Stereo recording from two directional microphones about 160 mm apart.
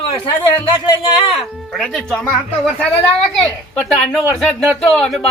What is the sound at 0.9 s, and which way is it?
Speech, 30° left (ahead or behind).